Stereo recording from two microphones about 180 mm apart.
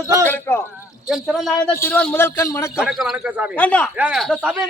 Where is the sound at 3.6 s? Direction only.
5° left (ahead or behind).